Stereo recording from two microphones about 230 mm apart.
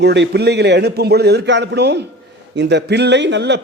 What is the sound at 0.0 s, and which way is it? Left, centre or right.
A man's voice, right.